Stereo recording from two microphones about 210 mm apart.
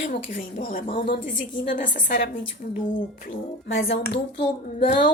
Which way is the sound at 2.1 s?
55° left (ahead or behind).